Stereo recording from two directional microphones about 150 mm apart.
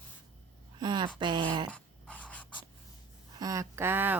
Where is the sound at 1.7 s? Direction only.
10° left (ahead or behind).